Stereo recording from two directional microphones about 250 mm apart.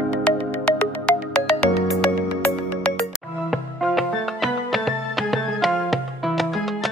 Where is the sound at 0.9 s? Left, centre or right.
Centre.